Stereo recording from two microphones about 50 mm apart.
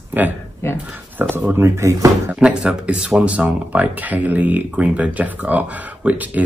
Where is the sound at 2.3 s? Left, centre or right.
Right.